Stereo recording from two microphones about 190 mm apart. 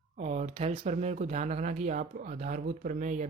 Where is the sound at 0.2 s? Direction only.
35° right (ahead or behind).